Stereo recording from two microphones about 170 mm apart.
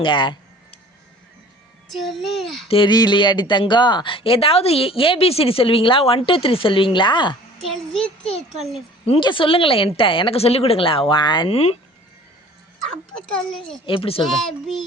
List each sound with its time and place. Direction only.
0.0 s a sound: 30° left (ahead or behind)
1.9 s a child's voice: centre (ahead or behind)
2.6 s speech: 30° left (ahead or behind)
7.7 s a child's voice: 5° left (ahead or behind)
9.0 s speech: 30° left (ahead or behind)
13.3 s a child's voice: 5° left (ahead or behind)
13.8 s speech: 30° left (ahead or behind)
14.3 s a child's voice: centre (ahead or behind)